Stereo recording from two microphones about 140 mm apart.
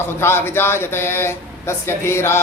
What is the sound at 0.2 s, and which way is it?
Speech, 15° left (ahead or behind).